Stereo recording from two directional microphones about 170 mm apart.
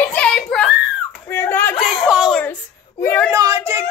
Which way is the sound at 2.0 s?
5° right (ahead or behind).